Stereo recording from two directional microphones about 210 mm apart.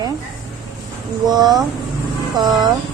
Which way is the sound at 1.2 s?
20° right (ahead or behind).